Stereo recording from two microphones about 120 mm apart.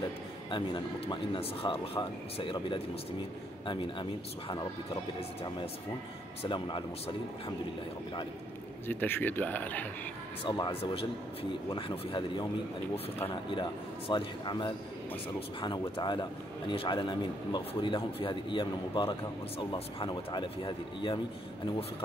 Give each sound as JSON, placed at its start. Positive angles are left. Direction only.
{"t": 0.5, "sound": "speech", "side_deg": 40}
{"t": 3.6, "sound": "speech", "side_deg": 40}
{"t": 6.4, "sound": "speech", "side_deg": 45}
{"t": 8.8, "sound": "speech", "side_deg": 15}
{"t": 10.4, "sound": "a man's voice", "side_deg": 40}
{"t": 10.7, "sound": "speech", "side_deg": 55}
{"t": 13.5, "sound": "a man's voice", "side_deg": 45}
{"t": 16.0, "sound": "a man's voice", "side_deg": 40}